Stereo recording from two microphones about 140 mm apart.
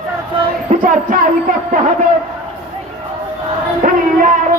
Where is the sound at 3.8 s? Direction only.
70° right (ahead or behind).